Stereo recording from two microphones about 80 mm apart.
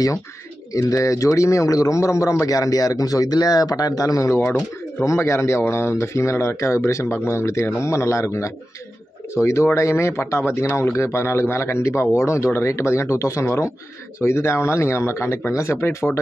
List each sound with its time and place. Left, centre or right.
0.7 s speech: left